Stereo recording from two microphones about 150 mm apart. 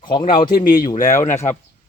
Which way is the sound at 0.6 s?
65° left (ahead or behind).